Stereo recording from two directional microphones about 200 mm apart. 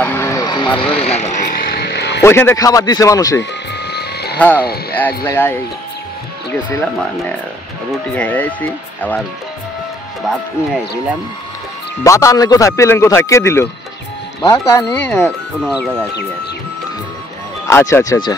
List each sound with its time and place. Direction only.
0.0 s vehicle: 10° left (ahead or behind); by 1.6 s 35° left (ahead or behind)
1.6 s music: 50° left (ahead or behind)
2.2 s speech: 10° left (ahead or behind)
3.8 s hum: 55° left (ahead or behind)
4.9 s speech: 10° left (ahead or behind)
7.9 s speech: 5° left (ahead or behind)
10.2 s speech: centre (ahead or behind)
12.0 s speech: 15° left (ahead or behind)
17.6 s speech: 15° left (ahead or behind)